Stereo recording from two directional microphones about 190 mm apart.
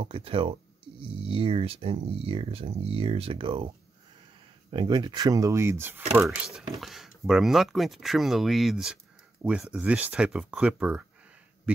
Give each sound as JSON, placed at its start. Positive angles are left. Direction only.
{"t": 0.0, "sound": "speech", "side_deg": -30}